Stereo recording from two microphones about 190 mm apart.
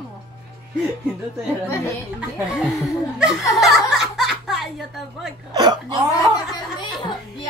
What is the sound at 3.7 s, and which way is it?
Snicker, centre (ahead or behind).